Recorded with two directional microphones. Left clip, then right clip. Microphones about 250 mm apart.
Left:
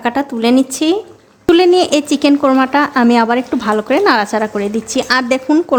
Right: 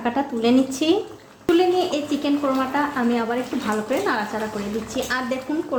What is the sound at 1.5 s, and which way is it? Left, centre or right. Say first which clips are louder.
A woman's voice: left 9 dB; left.